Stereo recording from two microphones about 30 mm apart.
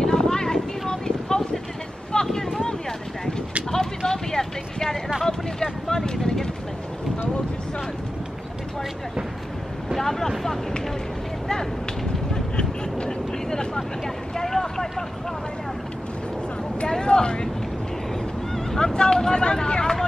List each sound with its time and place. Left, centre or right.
0.0 s vehicle: left
3.7 s vehicle: centre
5.2 s a sound: centre
9.9 s vehicle: centre
12.5 s vehicle: left
13.7 s vehicle: centre
16.8 s vehicle: left
18.7 s vehicle: centre